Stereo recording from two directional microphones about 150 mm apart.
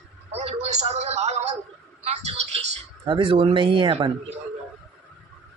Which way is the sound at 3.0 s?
35° right (ahead or behind).